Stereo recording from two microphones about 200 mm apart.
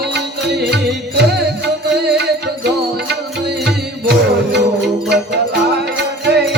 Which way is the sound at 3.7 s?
55° right (ahead or behind).